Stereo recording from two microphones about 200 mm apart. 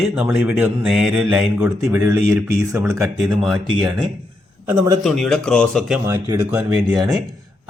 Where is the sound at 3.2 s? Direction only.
Centre (ahead or behind).